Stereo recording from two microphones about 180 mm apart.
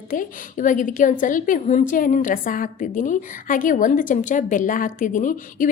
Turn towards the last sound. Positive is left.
turn(degrees=45)  # may be behind; listen again after turning